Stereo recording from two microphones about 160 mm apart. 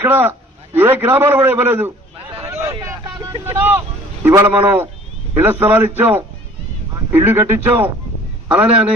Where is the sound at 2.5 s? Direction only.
15° right (ahead or behind).